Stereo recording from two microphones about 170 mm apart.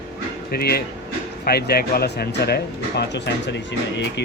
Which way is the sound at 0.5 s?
65° left (ahead or behind).